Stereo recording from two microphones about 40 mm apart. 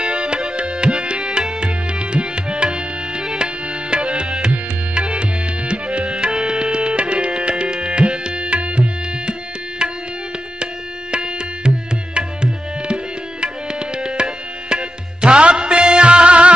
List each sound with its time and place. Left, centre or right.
0.0 s tabla: right
10.6 s tabla: right